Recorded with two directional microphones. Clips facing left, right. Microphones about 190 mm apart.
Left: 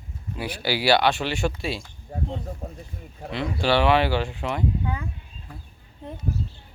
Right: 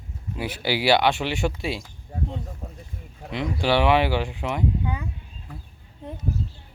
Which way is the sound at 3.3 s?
15° right (ahead or behind).